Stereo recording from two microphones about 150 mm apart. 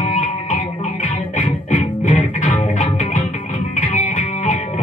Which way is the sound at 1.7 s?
60° left (ahead or behind).